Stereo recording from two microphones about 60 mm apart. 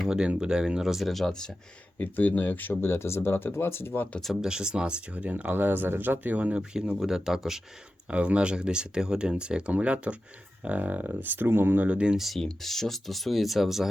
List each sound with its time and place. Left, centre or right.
0.1 s speech: centre
2.0 s speech: left
4.4 s speech: centre
7.0 s speech: centre
8.0 s speech: right
11.9 s speech: centre
12.1 s speech: centre